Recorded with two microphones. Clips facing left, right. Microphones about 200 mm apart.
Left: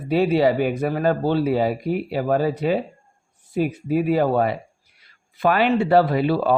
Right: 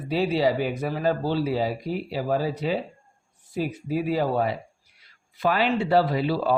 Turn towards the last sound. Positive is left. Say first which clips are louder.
# left 4 dB
turn(degrees=55)  # may be behind; listen again after turning